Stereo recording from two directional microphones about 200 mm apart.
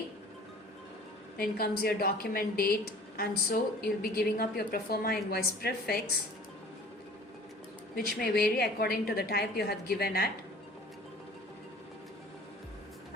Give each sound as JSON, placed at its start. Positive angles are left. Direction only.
{"t": 1.4, "sound": "a woman's voice", "side_deg": 50}
{"t": 7.9, "sound": "a woman's voice", "side_deg": 50}